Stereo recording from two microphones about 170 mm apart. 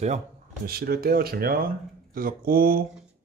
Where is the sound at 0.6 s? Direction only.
65° right (ahead or behind).